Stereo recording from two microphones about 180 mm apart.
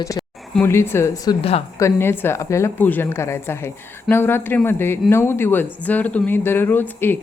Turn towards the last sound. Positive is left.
turn(degrees=10)  # may be behind; listen again after turning